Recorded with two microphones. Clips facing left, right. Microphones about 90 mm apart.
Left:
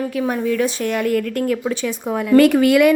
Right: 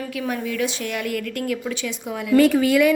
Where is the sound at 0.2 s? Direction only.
40° left (ahead or behind).